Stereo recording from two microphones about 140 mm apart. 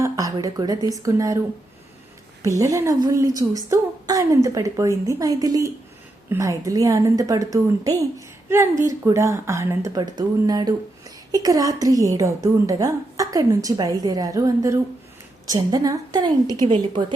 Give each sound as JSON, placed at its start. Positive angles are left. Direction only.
{"t": 0.0, "sound": "a woman's voice", "side_deg": -25}
{"t": 2.4, "sound": "a woman's voice", "side_deg": -25}